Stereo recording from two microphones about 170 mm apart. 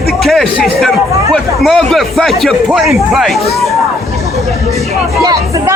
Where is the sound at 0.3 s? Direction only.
Centre (ahead or behind).